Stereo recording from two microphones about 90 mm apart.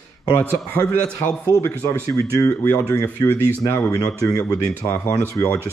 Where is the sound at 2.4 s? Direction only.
20° left (ahead or behind).